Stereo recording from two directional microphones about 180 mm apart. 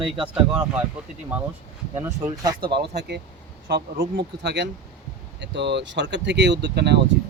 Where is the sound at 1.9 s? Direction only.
15° right (ahead or behind).